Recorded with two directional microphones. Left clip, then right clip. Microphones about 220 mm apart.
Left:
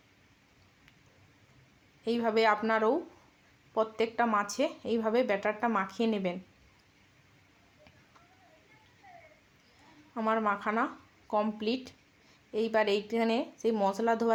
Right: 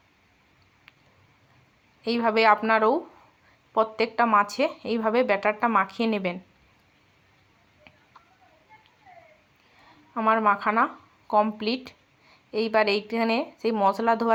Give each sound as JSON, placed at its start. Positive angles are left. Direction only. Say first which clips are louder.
{"t": 2.0, "sound": "a woman's voice", "louder": "right 7 dB", "side_deg": -20}
{"t": 10.2, "sound": "speech", "louder": "right 8 dB", "side_deg": -15}